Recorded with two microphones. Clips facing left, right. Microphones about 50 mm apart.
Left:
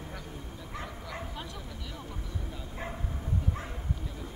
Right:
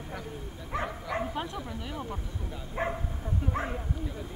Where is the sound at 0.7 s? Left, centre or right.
Right.